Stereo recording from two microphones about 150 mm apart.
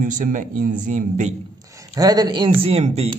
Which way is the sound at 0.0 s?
60° right (ahead or behind).